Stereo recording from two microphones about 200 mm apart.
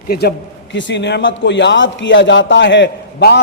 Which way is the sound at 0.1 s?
55° left (ahead or behind).